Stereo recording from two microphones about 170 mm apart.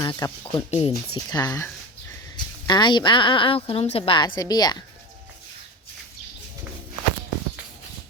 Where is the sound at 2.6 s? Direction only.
25° left (ahead or behind).